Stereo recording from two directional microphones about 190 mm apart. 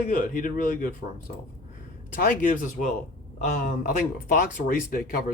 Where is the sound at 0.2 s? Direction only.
45° left (ahead or behind).